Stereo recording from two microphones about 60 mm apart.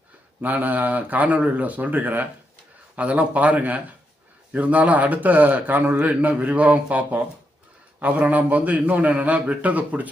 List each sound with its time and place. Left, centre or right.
0.4 s a man's voice: right